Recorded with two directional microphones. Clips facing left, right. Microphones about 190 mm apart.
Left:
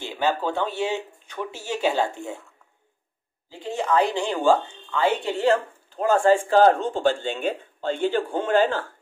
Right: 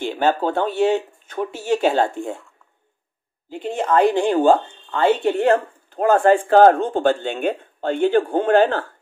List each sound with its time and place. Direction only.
0.0 s speech: 50° right (ahead or behind)
3.8 s speech: 55° right (ahead or behind)